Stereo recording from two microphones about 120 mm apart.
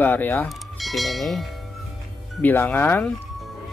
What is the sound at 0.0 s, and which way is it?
Speech, 15° left (ahead or behind).